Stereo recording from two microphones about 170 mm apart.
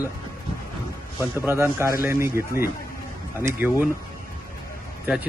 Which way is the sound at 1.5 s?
15° right (ahead or behind).